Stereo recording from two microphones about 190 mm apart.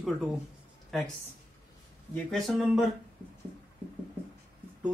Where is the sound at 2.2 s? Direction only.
Centre (ahead or behind).